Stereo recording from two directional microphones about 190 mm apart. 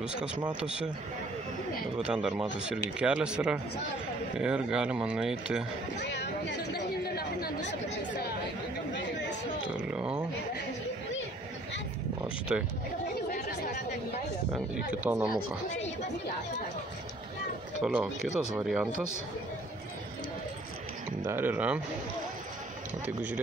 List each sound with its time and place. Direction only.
0.6 s speech: 5° right (ahead or behind)
2.0 s speech: 5° right (ahead or behind)
5.9 s chatter: 65° left (ahead or behind)
7.4 s speech: 65° left (ahead or behind)
9.8 s speech: 5° right (ahead or behind)
12.5 s speech: 5° right (ahead or behind)
13.3 s chatter: 40° left (ahead or behind)
14.9 s speech: 5° right (ahead or behind)
17.8 s speech: 5° right (ahead or behind)
21.3 s speech: 10° right (ahead or behind)
23.0 s speech: 10° right (ahead or behind)